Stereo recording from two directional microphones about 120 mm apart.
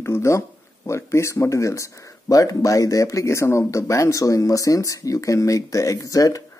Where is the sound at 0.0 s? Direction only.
20° left (ahead or behind).